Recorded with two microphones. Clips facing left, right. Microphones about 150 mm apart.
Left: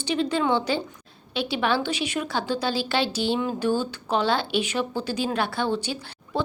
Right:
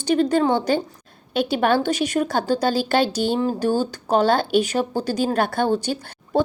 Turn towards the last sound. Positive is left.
turn(degrees=-45)  # may be behind; listen again after turning